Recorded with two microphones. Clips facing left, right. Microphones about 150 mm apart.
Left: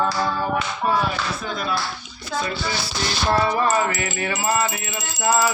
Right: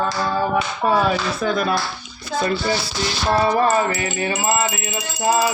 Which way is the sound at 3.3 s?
30° right (ahead or behind).